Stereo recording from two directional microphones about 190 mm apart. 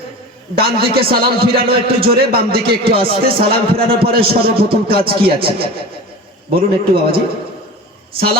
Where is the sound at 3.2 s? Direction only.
50° right (ahead or behind).